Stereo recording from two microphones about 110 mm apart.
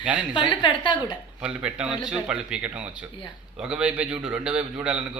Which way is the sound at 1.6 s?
10° right (ahead or behind).